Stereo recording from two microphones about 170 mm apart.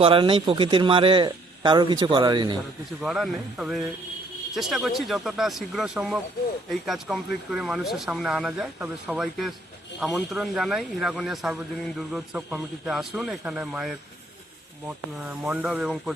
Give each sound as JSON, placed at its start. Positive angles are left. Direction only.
{"t": 0.0, "sound": "speech", "side_deg": -30}
{"t": 3.0, "sound": "speech", "side_deg": 0}